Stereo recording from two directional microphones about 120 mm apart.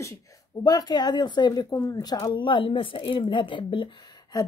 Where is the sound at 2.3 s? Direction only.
40° left (ahead or behind).